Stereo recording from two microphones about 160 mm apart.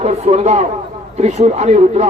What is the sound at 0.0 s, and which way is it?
Speech, 40° right (ahead or behind).